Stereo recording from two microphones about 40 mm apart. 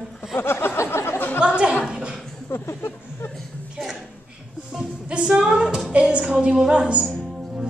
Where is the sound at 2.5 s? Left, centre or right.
Left.